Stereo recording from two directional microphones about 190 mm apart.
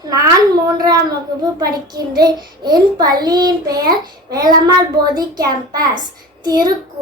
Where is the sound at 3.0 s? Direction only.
20° right (ahead or behind).